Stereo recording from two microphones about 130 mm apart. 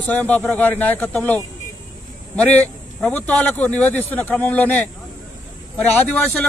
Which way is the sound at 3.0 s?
10° left (ahead or behind).